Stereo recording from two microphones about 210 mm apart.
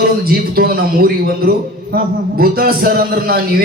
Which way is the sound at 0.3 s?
45° right (ahead or behind).